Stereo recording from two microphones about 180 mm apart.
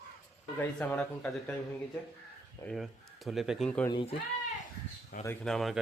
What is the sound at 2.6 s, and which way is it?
Speech, centre (ahead or behind).